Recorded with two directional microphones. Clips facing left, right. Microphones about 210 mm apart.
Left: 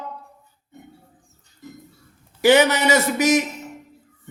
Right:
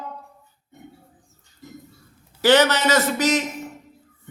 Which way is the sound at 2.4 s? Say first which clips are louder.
Left 1 dB; 15° left (ahead or behind).